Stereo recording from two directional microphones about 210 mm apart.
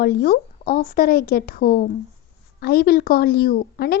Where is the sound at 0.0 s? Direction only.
50° left (ahead or behind).